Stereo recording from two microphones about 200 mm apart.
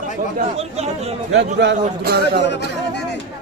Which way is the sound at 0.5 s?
30° right (ahead or behind).